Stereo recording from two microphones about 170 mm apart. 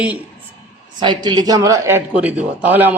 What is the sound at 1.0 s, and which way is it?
A man's voice, 25° right (ahead or behind).